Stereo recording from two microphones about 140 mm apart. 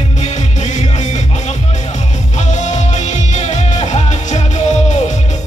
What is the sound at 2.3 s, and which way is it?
Music, 60° left (ahead or behind).